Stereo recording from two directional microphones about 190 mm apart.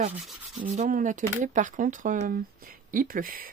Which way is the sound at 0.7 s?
45° right (ahead or behind).